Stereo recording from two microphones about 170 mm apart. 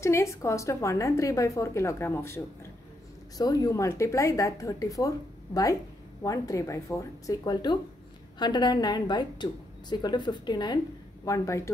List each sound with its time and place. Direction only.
0.0 s a woman's voice: 15° left (ahead or behind)